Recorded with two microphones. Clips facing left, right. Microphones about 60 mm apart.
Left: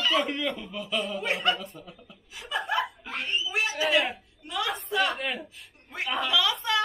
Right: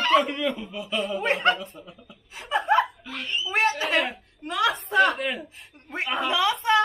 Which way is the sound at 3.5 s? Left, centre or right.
Right.